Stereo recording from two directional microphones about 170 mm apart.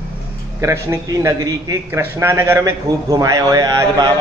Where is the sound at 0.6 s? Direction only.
15° right (ahead or behind).